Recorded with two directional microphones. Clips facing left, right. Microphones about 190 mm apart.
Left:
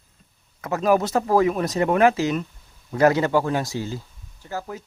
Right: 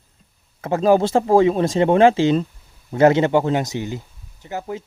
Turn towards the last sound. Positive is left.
turn(degrees=-25)  # may be behind; listen again after turning